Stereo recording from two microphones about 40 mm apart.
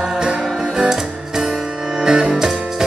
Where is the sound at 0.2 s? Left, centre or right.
Centre.